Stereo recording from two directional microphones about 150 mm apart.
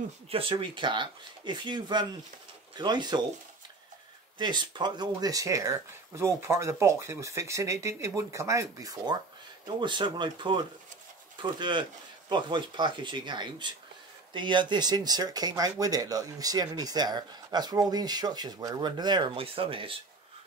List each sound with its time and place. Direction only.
0.3 s speech: 35° right (ahead or behind)
4.4 s speech: 30° right (ahead or behind)